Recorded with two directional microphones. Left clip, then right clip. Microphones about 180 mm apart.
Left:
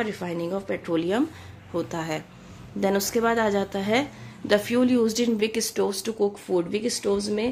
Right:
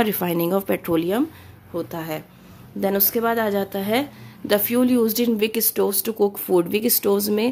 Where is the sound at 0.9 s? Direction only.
20° right (ahead or behind).